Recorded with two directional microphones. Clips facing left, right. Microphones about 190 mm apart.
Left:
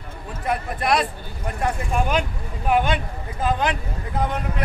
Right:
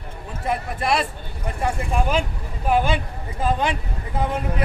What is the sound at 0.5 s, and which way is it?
Speech, 5° right (ahead or behind).